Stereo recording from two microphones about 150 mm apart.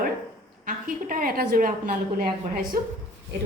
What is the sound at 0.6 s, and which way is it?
A woman's voice, 65° right (ahead or behind).